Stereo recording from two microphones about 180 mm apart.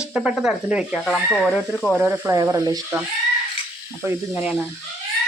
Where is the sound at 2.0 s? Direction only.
15° right (ahead or behind).